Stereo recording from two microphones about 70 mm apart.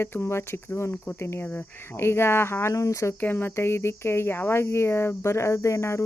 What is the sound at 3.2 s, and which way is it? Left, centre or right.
Speech, left.